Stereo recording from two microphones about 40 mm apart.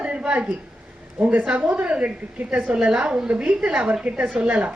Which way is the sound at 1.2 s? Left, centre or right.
Right.